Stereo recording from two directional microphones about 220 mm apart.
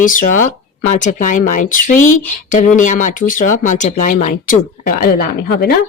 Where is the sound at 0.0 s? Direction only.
35° left (ahead or behind).